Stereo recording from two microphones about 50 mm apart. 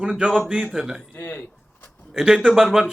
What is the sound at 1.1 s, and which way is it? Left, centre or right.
Speech, left.